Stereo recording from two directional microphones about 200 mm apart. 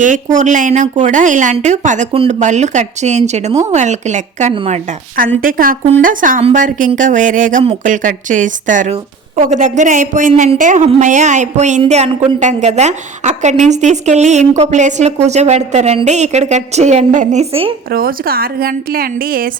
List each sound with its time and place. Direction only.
0.0 s a woman's voice: 40° right (ahead or behind)
5.1 s a woman's voice: 45° right (ahead or behind); by 17.7 s 30° right (ahead or behind)
17.9 s a woman's voice: 50° right (ahead or behind)